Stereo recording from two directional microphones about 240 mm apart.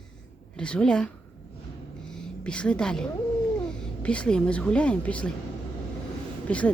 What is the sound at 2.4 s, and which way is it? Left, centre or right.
Speech, centre.